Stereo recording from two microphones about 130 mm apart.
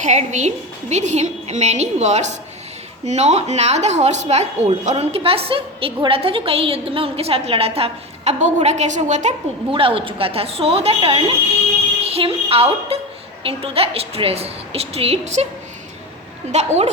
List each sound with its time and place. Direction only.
0.0 s a woman's voice: 65° right (ahead or behind)
9.7 s a woman's voice: 45° right (ahead or behind); by 15.4 s 60° right (ahead or behind)